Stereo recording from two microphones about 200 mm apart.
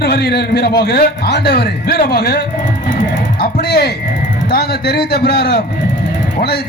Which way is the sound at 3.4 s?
55° left (ahead or behind).